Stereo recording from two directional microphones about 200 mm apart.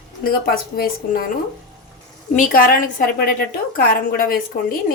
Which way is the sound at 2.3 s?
45° left (ahead or behind).